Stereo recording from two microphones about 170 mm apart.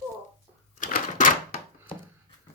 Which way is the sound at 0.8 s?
50° left (ahead or behind).